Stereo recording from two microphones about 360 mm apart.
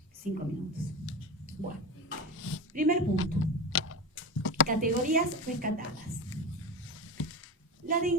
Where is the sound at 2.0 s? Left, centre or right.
Left.